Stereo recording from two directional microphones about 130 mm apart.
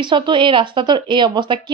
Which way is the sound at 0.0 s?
40° right (ahead or behind).